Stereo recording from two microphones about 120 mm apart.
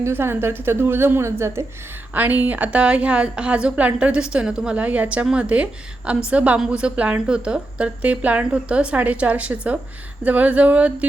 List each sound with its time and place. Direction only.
0.0 s a woman's voice: 20° right (ahead or behind)